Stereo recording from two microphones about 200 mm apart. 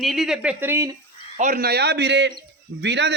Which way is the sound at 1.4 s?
40° right (ahead or behind).